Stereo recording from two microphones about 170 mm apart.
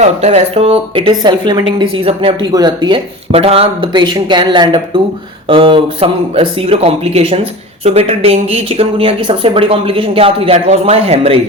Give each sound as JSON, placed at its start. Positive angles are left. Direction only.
{"t": 0.0, "sound": "speech", "side_deg": -40}